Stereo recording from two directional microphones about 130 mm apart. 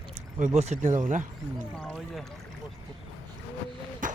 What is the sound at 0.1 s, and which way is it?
Speech, 65° right (ahead or behind).